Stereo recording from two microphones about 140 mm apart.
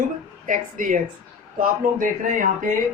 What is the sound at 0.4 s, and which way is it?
A man's voice, 75° right (ahead or behind).